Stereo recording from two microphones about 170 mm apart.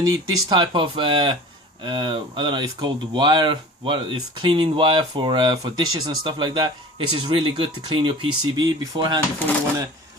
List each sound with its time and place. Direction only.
0.0 s speech: 25° right (ahead or behind)